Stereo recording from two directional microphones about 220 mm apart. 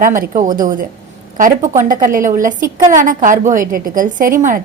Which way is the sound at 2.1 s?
35° right (ahead or behind).